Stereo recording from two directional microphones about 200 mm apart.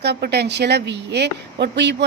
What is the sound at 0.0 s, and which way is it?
Speech, 55° right (ahead or behind).